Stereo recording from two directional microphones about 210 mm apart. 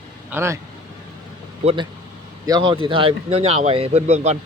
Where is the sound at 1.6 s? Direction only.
25° right (ahead or behind).